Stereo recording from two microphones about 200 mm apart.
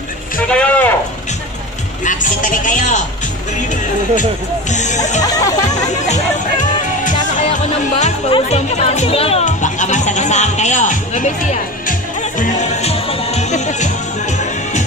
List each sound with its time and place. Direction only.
0.5 s a sound: 5° left (ahead or behind)
2.0 s a man's voice: 40° left (ahead or behind)
4.7 s a man's voice: 35° left (ahead or behind)
5.2 s speech: 15° left (ahead or behind)
5.9 s music: 35° left (ahead or behind)
8.0 s speech: 30° left (ahead or behind)
12.4 s music: 35° left (ahead or behind)